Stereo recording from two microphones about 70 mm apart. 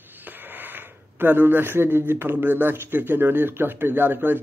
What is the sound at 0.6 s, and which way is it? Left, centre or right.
Speech, right.